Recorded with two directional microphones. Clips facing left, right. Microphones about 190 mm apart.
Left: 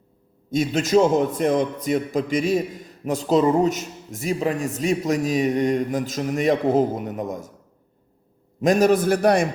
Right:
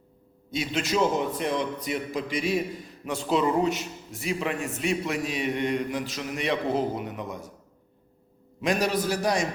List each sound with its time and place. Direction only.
0.5 s a man's voice: 45° left (ahead or behind)
8.6 s speech: 45° left (ahead or behind)